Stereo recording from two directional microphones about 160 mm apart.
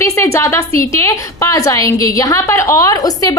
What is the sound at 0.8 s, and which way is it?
A woman's voice, 20° left (ahead or behind).